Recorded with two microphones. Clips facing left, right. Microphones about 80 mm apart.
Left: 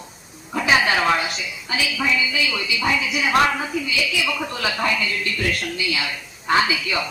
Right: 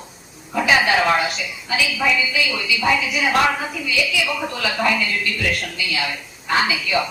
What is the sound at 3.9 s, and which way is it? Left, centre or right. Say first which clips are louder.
Speech: right 4 dB; left.